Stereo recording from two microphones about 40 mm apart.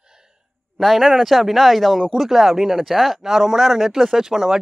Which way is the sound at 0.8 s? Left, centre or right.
Centre.